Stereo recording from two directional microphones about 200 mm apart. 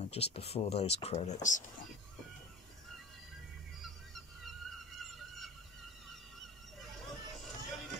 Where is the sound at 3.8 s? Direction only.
Centre (ahead or behind).